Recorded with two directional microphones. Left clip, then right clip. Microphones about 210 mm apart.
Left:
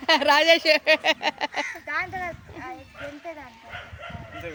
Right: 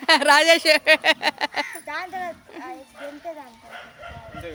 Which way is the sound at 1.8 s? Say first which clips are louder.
Left 1 dB; 30° right (ahead or behind).